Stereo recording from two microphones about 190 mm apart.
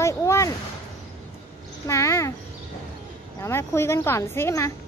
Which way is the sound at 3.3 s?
15° left (ahead or behind).